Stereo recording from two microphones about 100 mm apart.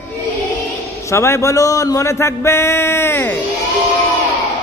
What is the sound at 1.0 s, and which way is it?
A man's voice, 25° left (ahead or behind).